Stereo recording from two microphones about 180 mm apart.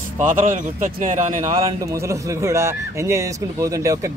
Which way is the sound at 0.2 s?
45° right (ahead or behind).